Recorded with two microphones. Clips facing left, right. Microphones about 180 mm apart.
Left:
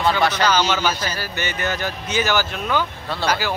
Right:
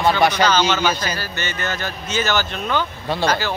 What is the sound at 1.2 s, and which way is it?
Speech, 15° left (ahead or behind).